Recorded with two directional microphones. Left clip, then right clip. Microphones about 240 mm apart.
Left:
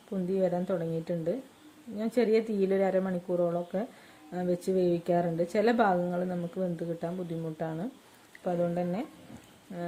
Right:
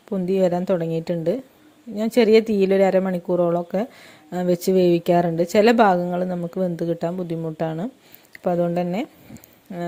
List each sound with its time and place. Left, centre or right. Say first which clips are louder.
0.1 s speech: right 9 dB; right